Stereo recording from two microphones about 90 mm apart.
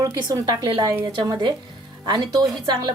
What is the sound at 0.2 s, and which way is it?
Speech, 50° right (ahead or behind).